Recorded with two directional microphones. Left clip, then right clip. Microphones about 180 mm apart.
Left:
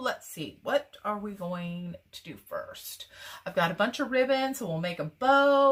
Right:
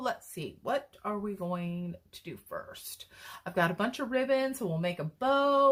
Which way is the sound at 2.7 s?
40° right (ahead or behind).